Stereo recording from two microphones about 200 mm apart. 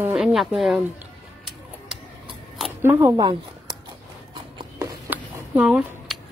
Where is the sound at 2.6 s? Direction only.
15° right (ahead or behind).